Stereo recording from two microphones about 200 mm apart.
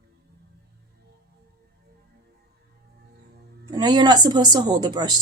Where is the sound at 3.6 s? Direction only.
20° right (ahead or behind).